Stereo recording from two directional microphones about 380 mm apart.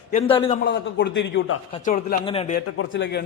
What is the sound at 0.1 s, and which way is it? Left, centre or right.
Speech, centre.